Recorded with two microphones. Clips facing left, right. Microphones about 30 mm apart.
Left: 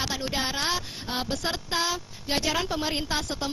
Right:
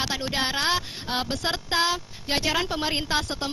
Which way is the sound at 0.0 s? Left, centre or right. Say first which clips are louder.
Right 2 dB; centre.